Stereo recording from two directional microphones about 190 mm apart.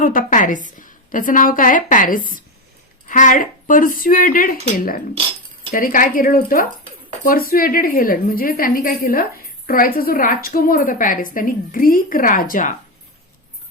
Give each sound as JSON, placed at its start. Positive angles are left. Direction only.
{"t": 0.0, "sound": "a woman's voice", "side_deg": 45}
{"t": 5.7, "sound": "a woman's voice", "side_deg": 45}